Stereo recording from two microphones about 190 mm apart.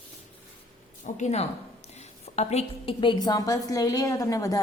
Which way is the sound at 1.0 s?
40° left (ahead or behind).